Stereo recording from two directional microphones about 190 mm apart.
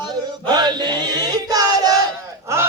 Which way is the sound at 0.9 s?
20° right (ahead or behind).